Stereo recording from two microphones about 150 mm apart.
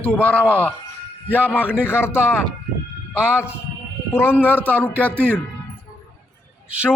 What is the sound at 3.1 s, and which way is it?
Speech, 10° right (ahead or behind).